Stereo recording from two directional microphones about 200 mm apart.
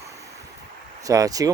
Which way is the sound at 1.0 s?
15° right (ahead or behind).